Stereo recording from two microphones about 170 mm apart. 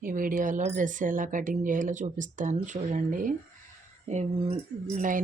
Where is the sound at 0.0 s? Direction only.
55° right (ahead or behind).